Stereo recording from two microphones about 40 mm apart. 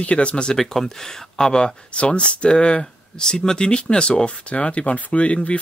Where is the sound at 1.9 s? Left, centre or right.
Left.